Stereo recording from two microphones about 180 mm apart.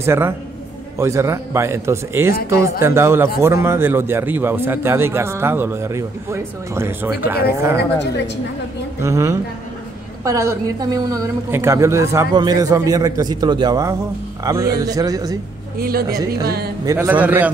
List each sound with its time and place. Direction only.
0.0 s a man's voice: 15° right (ahead or behind)
9.0 s a man's voice: 15° right (ahead or behind)
15.8 s speech: 55° right (ahead or behind)
16.8 s a man's voice: 15° right (ahead or behind)